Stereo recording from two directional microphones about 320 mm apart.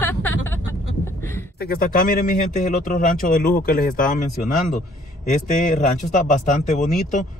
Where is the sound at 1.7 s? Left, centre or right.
Left.